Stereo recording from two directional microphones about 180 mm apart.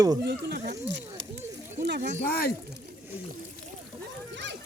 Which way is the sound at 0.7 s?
75° right (ahead or behind).